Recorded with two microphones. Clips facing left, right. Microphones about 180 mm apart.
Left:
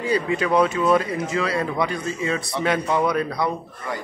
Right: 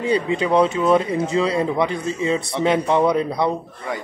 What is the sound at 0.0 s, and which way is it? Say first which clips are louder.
A man's voice: right 2 dB; 25° right (ahead or behind).